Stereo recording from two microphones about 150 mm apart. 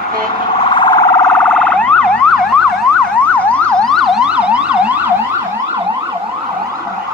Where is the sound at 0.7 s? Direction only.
30° left (ahead or behind).